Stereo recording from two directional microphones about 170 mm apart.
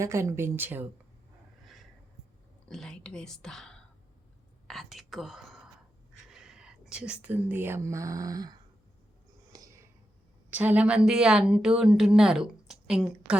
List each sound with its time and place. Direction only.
0.0 s speech: 15° right (ahead or behind)
2.6 s speech: centre (ahead or behind); by 8.5 s 20° right (ahead or behind)
9.5 s a sound: 20° right (ahead or behind)
10.5 s a woman's voice: 10° right (ahead or behind)